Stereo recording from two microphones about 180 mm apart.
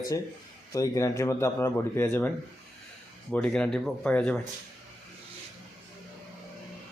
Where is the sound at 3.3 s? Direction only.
5° left (ahead or behind).